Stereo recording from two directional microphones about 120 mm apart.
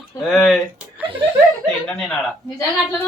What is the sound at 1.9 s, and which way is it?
Speech, 5° left (ahead or behind).